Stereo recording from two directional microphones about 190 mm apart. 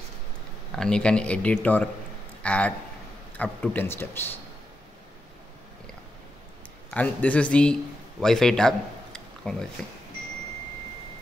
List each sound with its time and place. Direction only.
0.7 s a man's voice: 5° left (ahead or behind)
6.9 s a man's voice: 5° left (ahead or behind)